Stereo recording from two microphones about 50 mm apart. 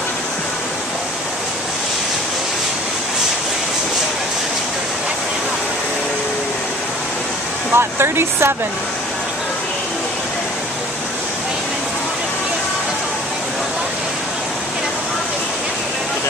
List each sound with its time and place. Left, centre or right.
7.7 s speech: right